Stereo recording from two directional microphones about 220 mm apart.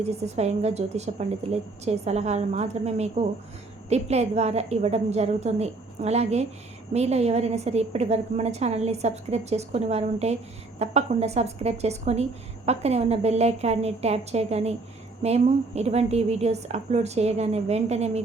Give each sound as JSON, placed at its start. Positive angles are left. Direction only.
{"t": 0.0, "sound": "a woman's voice", "side_deg": -30}